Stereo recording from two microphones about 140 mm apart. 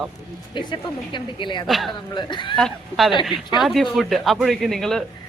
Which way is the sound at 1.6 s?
Centre (ahead or behind).